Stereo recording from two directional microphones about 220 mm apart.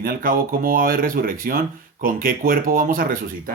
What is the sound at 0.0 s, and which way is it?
Speech, 40° right (ahead or behind).